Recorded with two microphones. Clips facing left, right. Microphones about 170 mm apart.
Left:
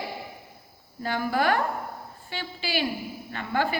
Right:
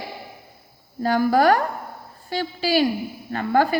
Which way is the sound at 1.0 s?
40° right (ahead or behind).